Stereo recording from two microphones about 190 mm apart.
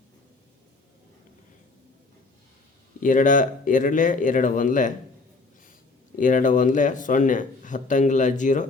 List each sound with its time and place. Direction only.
3.0 s a man's voice: 45° left (ahead or behind)
6.1 s a man's voice: 45° left (ahead or behind)